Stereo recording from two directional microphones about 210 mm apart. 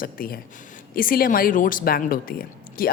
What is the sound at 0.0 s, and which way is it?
Speech, 45° left (ahead or behind).